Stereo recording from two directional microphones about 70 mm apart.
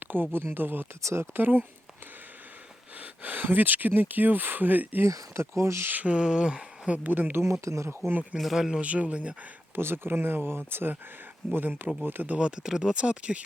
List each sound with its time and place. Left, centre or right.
0.0 s a sound: right
0.3 s speech: right
3.0 s speech: right
5.0 s speech: right
5.9 s speech: centre
7.6 s speech: right
8.4 s speech: centre
8.8 s speech: centre
9.7 s speech: right; by 13.4 s centre